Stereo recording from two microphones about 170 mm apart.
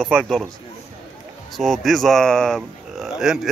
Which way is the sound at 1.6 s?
Centre (ahead or behind).